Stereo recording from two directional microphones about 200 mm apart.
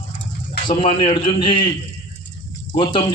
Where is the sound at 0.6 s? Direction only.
25° left (ahead or behind).